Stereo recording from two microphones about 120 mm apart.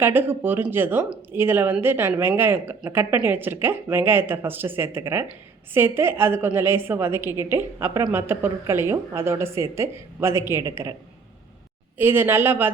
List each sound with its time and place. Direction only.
0.0 s a woman's voice: 15° right (ahead or behind)
11.9 s speech: 15° right (ahead or behind)